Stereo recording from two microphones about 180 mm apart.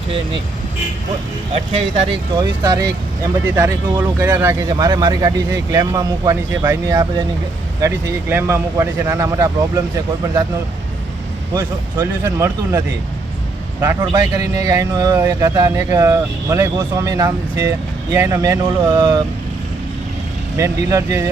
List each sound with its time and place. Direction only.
2.4 s speech: 20° right (ahead or behind)
11.5 s speech: 20° right (ahead or behind)
14.0 s speech: 25° right (ahead or behind)
20.6 s speech: 15° right (ahead or behind)